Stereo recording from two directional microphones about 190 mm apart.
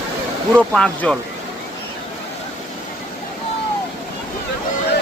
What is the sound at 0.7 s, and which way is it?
Speech, 5° left (ahead or behind).